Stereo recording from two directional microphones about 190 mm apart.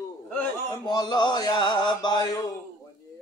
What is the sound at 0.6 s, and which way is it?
Mantra, 20° left (ahead or behind).